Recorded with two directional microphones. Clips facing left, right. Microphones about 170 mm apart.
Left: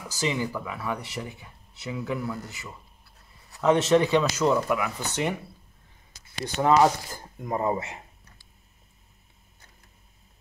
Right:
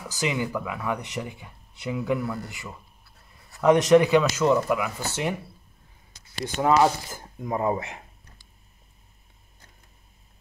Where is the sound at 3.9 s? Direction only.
10° right (ahead or behind).